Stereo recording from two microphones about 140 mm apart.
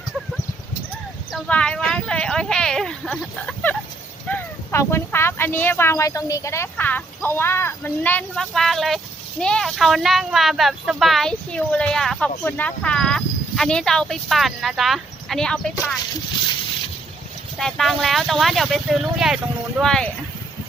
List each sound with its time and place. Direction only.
1.5 s speech: 5° left (ahead or behind)
17.6 s speech: centre (ahead or behind)